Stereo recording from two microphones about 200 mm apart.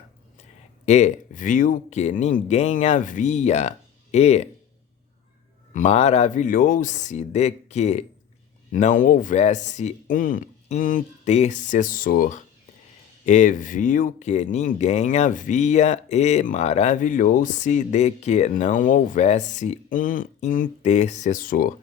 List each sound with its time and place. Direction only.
0.9 s speech: 35° left (ahead or behind)
5.7 s speech: 35° left (ahead or behind)